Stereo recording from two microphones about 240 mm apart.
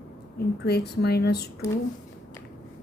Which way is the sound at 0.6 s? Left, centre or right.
Left.